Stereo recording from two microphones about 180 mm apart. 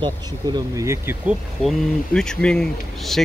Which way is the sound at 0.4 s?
20° right (ahead or behind).